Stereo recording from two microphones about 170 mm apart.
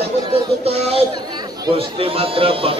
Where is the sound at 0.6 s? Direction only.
35° right (ahead or behind).